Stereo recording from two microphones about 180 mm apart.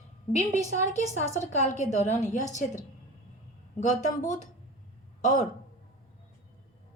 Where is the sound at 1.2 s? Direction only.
40° left (ahead or behind).